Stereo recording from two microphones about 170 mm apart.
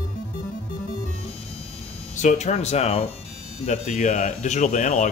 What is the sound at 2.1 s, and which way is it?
Speech, 45° left (ahead or behind).